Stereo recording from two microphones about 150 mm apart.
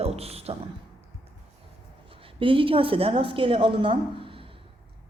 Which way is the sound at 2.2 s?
35° right (ahead or behind).